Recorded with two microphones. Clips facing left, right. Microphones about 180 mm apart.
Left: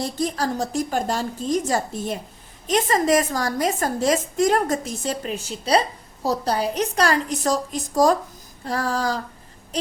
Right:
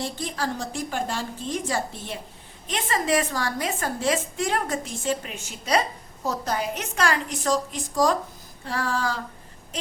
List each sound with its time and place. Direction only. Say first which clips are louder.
0.0 s a woman's voice: left 5 dB; 40° left (ahead or behind)